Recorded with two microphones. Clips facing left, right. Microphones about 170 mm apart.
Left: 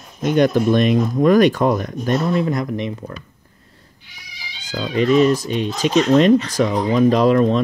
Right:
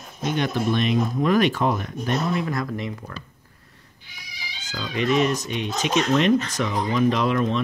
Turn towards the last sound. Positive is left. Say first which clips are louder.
# left 8 dB
turn(degrees=40)  # may be behind; listen again after turning